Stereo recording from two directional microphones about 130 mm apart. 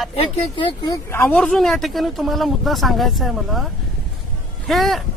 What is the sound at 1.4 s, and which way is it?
Speech, 5° left (ahead or behind).